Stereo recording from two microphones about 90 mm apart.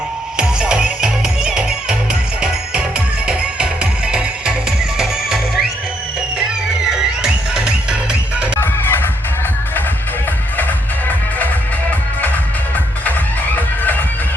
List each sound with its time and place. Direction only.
0.3 s music: 10° right (ahead or behind)
3.2 s music: 10° right (ahead or behind)
6.9 s music: 5° right (ahead or behind)
8.6 s music: 25° left (ahead or behind)
10.6 s music: 20° left (ahead or behind)